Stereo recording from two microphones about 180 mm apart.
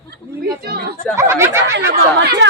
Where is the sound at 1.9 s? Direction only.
65° right (ahead or behind).